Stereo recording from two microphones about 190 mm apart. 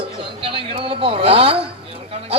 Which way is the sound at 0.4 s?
30° right (ahead or behind).